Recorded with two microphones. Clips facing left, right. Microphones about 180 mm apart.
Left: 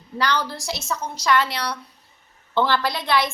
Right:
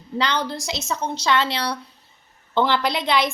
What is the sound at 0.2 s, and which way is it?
A woman's voice, 20° right (ahead or behind).